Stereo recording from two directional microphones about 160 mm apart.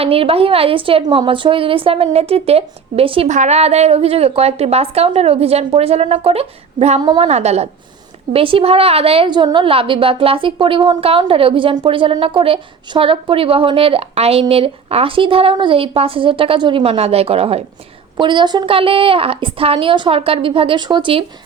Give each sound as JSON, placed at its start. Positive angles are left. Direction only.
{"t": 0.0, "sound": "a woman's voice", "side_deg": -35}
{"t": 3.2, "sound": "a woman's voice", "side_deg": -50}
{"t": 7.0, "sound": "a woman's voice", "side_deg": -30}
{"t": 7.3, "sound": "a woman's voice", "side_deg": -40}